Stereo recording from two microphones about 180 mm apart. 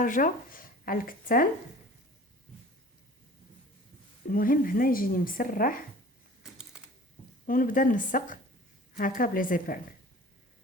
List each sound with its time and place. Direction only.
0.0 s speech: 50° left (ahead or behind)
4.3 s a woman's voice: 50° left (ahead or behind)
7.4 s a woman's voice: 50° left (ahead or behind)